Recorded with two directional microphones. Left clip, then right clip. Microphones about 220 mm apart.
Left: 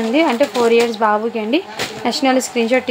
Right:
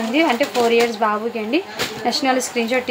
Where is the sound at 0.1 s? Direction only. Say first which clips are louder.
Left 2 dB; 25° left (ahead or behind).